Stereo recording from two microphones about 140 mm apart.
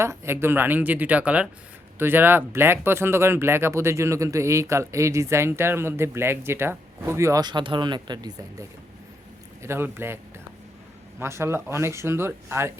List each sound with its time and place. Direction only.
0.0 s speech: 20° right (ahead or behind)
9.6 s speech: 15° right (ahead or behind)
11.2 s speech: 20° right (ahead or behind)